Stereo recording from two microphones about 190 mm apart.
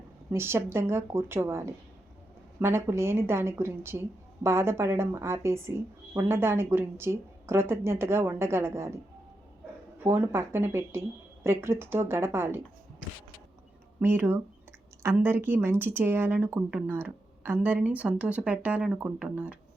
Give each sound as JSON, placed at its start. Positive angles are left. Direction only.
{"t": 0.3, "sound": "speech", "side_deg": -15}
{"t": 10.0, "sound": "speech", "side_deg": -10}
{"t": 14.0, "sound": "speech", "side_deg": -10}